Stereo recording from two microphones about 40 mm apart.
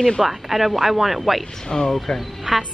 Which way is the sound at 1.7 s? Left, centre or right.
Centre.